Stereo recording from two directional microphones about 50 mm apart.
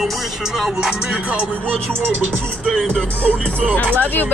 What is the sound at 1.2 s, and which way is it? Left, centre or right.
Speech, right.